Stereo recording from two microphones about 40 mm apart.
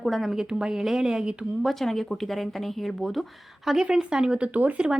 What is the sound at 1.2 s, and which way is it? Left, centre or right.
Speech, right.